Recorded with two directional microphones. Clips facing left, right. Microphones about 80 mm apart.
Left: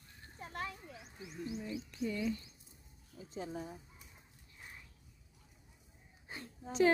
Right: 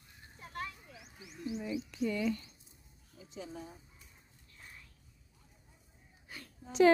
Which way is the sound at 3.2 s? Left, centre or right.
Left.